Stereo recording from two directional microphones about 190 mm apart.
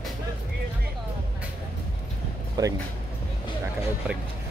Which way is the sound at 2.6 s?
20° right (ahead or behind).